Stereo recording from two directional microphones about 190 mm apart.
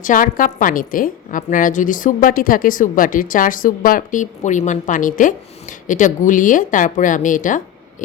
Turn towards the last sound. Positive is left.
turn(degrees=45)  # may be behind; listen again after turning